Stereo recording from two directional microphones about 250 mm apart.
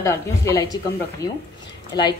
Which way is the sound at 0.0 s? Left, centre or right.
Centre.